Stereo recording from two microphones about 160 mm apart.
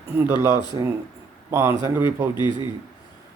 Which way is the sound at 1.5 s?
15° right (ahead or behind).